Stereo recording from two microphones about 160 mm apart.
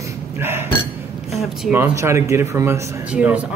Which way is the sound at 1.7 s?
15° right (ahead or behind).